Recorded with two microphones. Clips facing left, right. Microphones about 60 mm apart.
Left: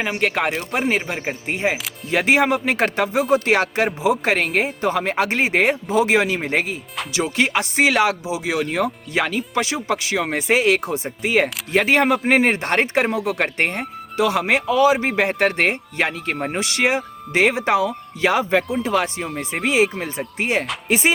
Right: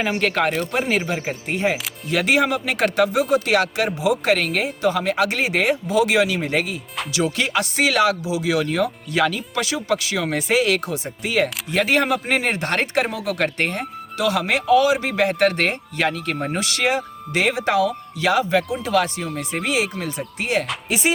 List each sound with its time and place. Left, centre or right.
0.0 s speech: centre